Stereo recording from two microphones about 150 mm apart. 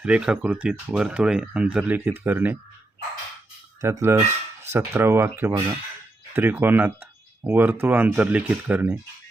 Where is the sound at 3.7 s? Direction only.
20° right (ahead or behind).